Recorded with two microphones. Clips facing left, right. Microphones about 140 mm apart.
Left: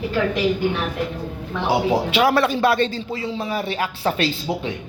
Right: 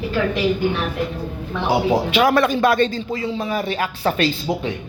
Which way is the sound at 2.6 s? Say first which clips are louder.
Right 2 dB; 45° right (ahead or behind).